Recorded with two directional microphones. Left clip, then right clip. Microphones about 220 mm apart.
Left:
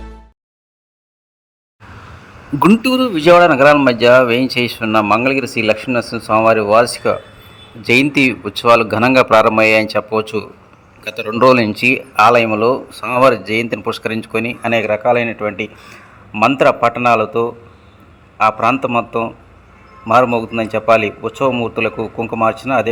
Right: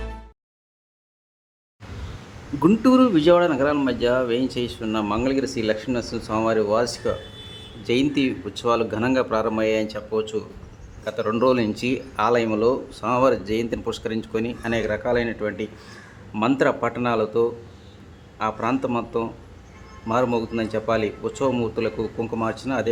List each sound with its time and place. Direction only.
2.6 s speech: 25° left (ahead or behind)